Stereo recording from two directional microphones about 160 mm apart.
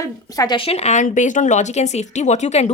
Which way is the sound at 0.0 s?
20° left (ahead or behind).